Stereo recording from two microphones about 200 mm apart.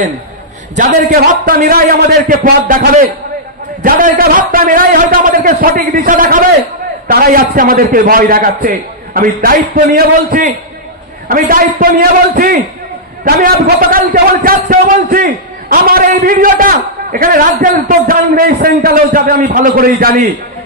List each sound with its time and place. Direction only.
0.7 s a man's voice: 40° right (ahead or behind)